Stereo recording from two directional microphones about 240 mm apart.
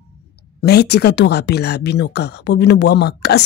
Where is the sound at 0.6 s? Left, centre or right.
Left.